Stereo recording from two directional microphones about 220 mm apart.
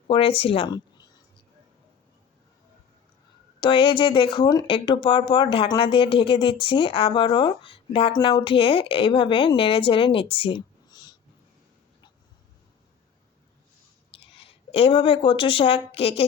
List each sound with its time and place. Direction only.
0.1 s speech: 25° left (ahead or behind)
3.6 s speech: 20° left (ahead or behind)
14.3 s speech: 25° left (ahead or behind)